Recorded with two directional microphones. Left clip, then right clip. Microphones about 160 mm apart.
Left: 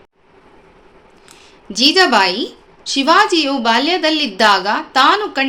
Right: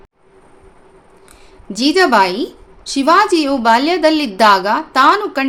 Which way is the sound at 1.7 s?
20° right (ahead or behind).